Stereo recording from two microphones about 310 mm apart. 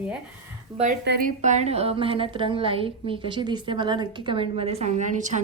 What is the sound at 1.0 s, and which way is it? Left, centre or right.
A woman's voice, right.